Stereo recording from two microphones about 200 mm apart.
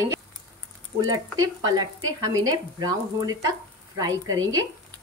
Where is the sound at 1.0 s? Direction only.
15° right (ahead or behind).